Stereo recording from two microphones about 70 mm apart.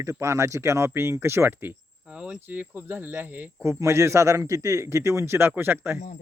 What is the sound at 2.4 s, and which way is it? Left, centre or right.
Speech, right.